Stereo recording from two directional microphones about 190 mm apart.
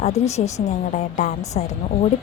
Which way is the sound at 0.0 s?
35° left (ahead or behind).